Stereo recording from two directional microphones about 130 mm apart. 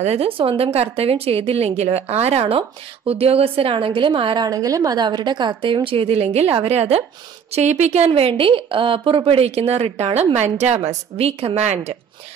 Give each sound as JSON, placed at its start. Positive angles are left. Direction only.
{"t": 0.0, "sound": "a woman's voice", "side_deg": -50}
{"t": 4.5, "sound": "a woman's voice", "side_deg": -25}